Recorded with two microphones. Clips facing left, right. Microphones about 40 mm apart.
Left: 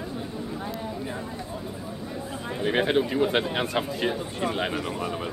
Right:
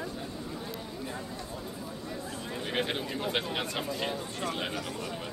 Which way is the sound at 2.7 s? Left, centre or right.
Left.